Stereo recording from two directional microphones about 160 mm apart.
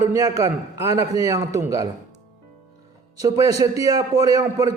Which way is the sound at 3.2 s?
20° right (ahead or behind).